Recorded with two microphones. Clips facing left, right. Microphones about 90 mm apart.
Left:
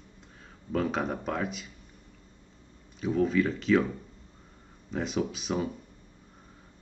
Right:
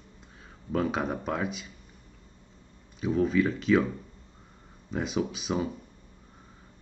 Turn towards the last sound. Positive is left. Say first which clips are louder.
# right 1 dB
turn(degrees=-5)  # may be behind; listen again after turning